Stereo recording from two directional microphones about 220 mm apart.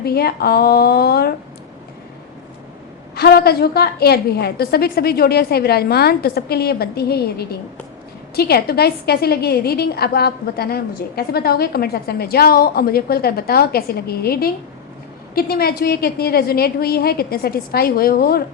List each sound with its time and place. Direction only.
0.0 s a woman's voice: 45° left (ahead or behind)
3.2 s a woman's voice: 45° left (ahead or behind)